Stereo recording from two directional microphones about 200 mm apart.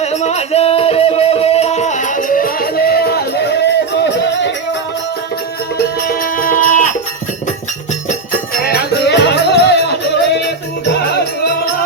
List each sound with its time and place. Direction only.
0.0 s music: 35° left (ahead or behind); by 4.5 s 60° left (ahead or behind)
6.1 s music: 45° left (ahead or behind)
8.5 s music: 50° left (ahead or behind)